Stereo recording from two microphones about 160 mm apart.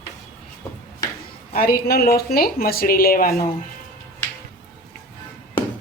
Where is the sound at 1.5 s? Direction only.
70° left (ahead or behind).